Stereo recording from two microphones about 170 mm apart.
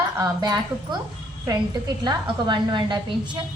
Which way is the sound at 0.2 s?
20° right (ahead or behind).